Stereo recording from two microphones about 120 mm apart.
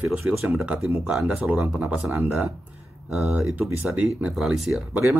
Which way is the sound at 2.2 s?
15° right (ahead or behind).